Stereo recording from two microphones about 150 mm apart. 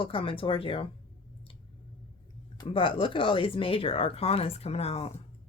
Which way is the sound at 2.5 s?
30° left (ahead or behind).